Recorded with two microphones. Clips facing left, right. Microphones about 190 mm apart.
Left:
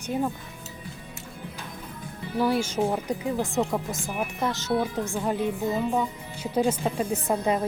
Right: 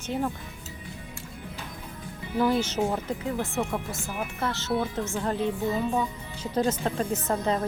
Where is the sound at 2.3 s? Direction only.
10° left (ahead or behind).